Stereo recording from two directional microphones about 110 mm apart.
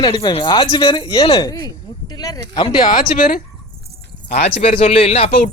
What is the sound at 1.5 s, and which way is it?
Speech, 35° left (ahead or behind).